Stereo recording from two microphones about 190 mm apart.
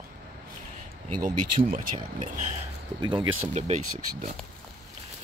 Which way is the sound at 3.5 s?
35° right (ahead or behind).